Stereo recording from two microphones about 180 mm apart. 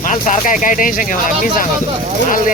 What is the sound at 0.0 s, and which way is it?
Speech, 45° left (ahead or behind).